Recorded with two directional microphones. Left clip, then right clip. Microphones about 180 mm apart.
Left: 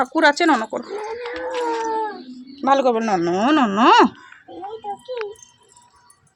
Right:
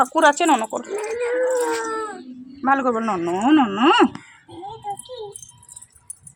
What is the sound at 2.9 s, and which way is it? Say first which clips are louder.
Speech: left 3 dB; 30° left (ahead or behind).